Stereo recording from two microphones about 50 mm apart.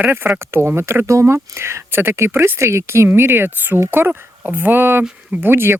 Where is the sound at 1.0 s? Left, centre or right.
Right.